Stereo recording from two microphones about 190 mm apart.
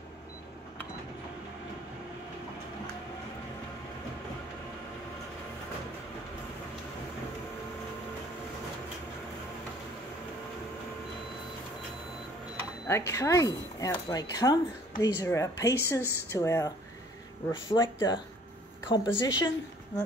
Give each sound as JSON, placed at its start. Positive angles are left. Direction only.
{"t": 12.8, "sound": "speech", "side_deg": 15}